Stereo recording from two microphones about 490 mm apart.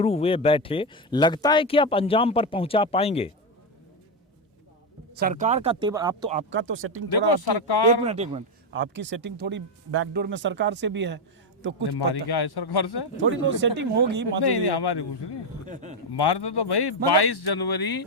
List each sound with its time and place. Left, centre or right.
0.0 s speech: centre
5.1 s speech: centre
6.5 s speech: right
7.1 s speech: left
8.0 s speech: centre
11.9 s speech: left
13.1 s speech: right
14.4 s speech: left
15.6 s a sound: centre
16.1 s speech: left